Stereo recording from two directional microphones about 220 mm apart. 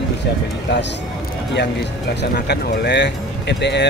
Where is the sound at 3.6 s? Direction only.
50° left (ahead or behind).